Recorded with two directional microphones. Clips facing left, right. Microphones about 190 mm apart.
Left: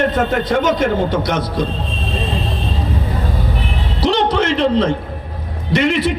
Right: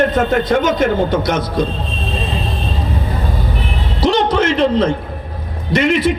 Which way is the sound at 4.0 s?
45° right (ahead or behind).